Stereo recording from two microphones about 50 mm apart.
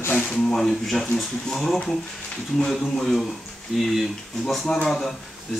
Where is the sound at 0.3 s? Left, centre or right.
Centre.